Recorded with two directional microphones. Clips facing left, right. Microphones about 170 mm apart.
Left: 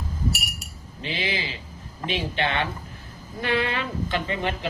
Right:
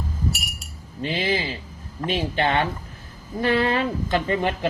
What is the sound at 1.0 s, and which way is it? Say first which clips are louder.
Speech: right 5 dB; 45° right (ahead or behind).